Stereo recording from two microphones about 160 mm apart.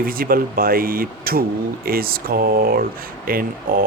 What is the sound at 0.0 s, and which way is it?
Speech, 65° right (ahead or behind).